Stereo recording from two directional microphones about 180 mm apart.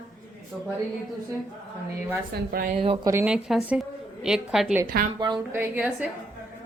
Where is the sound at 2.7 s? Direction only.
30° right (ahead or behind).